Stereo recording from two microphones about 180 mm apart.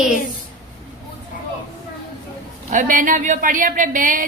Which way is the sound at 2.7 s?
45° right (ahead or behind).